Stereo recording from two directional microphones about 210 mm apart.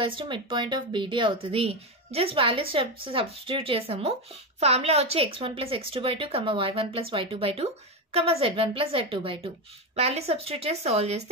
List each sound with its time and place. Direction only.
0.0 s a woman's voice: 25° right (ahead or behind)